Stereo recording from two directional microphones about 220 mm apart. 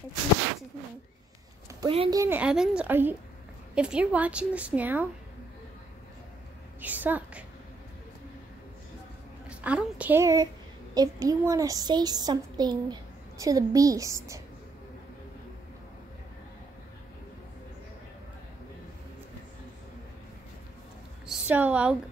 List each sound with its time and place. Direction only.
1.8 s a child's voice: 20° right (ahead or behind)
6.8 s a child's voice: 10° right (ahead or behind)
9.5 s a child's voice: 5° right (ahead or behind)
21.3 s a woman's voice: 5° right (ahead or behind)